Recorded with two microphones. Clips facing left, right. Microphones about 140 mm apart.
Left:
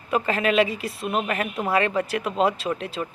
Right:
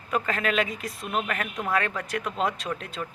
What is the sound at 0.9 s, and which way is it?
A woman's voice, 25° left (ahead or behind).